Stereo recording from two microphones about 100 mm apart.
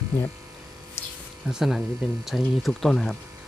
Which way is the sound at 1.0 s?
25° left (ahead or behind).